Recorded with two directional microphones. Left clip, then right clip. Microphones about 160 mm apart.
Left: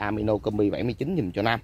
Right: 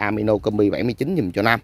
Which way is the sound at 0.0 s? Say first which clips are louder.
Right 6 dB; 45° right (ahead or behind).